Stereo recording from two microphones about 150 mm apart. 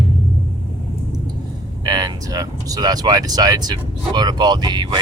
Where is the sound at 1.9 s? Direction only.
25° right (ahead or behind).